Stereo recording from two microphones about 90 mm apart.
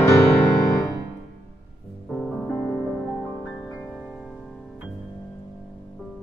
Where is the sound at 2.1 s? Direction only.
15° left (ahead or behind).